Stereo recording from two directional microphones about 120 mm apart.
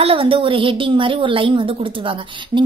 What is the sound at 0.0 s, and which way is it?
A woman's voice, 50° right (ahead or behind).